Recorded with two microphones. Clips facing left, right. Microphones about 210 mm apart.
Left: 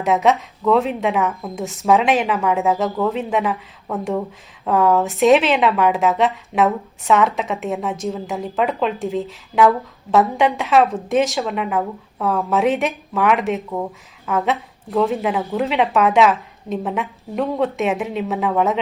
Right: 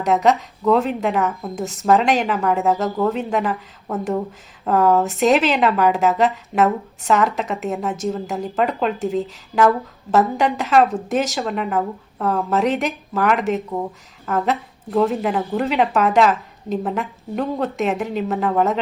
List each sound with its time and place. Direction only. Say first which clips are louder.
0.0 s speech: even; centre (ahead or behind)